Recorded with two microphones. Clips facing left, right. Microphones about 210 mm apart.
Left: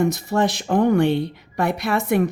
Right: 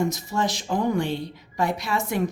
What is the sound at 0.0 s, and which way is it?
Speech, 60° left (ahead or behind).